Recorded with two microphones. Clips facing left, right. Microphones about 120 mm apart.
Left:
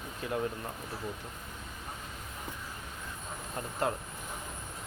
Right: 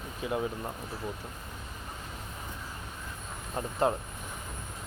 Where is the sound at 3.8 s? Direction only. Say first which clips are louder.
Right 5 dB; 25° right (ahead or behind).